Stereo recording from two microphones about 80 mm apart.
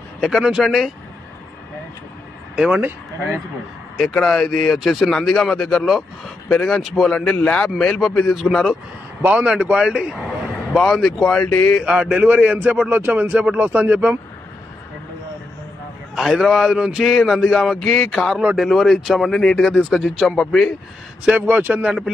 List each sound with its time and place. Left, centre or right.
0.2 s a man's voice: centre
2.5 s speech: centre
4.2 s a man's voice: centre
9.2 s speech: right; by 11.5 s centre
11.8 s speech: centre
16.2 s a man's voice: centre
19.7 s a man's voice: centre
21.4 s speech: right